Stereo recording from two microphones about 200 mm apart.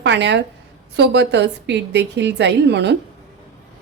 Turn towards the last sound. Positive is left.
turn(degrees=-60)  # may be behind; listen again after turning